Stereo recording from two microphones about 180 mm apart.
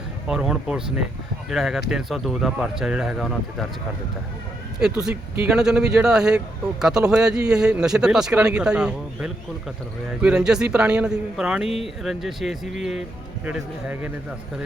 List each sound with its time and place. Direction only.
0.3 s speech: 5° right (ahead or behind)
5.0 s speech: 5° right (ahead or behind)